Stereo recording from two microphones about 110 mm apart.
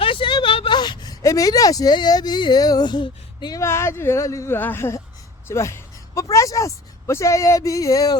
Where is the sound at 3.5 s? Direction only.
25° left (ahead or behind).